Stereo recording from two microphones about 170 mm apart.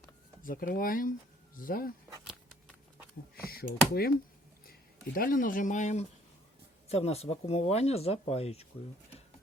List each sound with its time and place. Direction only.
0.4 s speech: 55° left (ahead or behind)
3.4 s speech: 65° left (ahead or behind)
5.1 s speech: 55° left (ahead or behind); by 8.6 s 40° left (ahead or behind)